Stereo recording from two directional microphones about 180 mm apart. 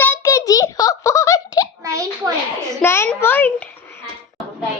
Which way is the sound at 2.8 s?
15° left (ahead or behind).